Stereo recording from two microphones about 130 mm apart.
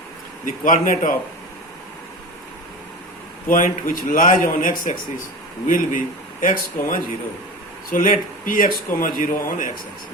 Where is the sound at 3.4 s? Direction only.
90° left.